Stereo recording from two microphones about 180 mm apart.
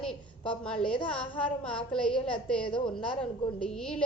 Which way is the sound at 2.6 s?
25° left (ahead or behind).